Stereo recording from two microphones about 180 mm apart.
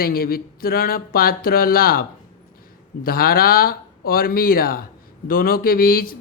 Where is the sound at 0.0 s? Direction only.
55° left (ahead or behind).